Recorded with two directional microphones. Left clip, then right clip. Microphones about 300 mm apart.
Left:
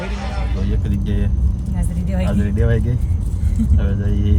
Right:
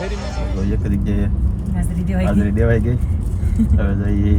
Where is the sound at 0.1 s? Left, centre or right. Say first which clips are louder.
Right 1 dB; right.